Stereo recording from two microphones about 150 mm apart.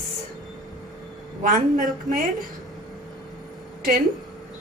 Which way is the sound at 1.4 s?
60° right (ahead or behind).